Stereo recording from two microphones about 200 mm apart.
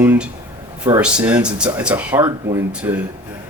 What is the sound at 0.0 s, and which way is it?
Speech, 10° right (ahead or behind).